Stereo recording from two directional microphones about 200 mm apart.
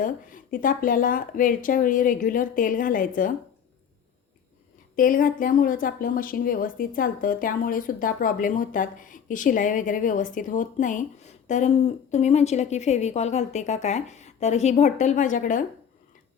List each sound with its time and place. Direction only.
0.0 s speech: 45° left (ahead or behind)
4.9 s speech: 45° left (ahead or behind)